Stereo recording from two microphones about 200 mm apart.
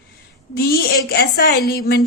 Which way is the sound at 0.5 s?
50° left (ahead or behind).